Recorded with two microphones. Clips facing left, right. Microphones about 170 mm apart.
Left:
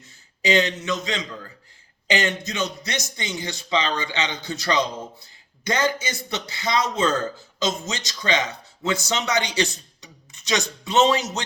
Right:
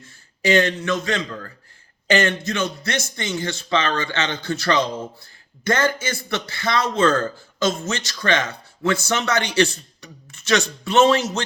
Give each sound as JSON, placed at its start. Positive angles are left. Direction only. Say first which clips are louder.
{"t": 0.0, "sound": "a man's voice", "louder": "right 3 dB", "side_deg": 20}